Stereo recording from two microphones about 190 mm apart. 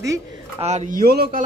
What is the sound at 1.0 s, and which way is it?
Speech, 55° right (ahead or behind).